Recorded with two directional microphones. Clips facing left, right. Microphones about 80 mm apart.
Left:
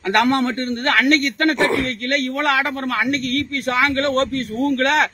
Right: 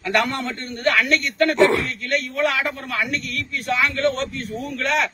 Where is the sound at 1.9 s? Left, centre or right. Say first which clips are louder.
Left 3 dB; left.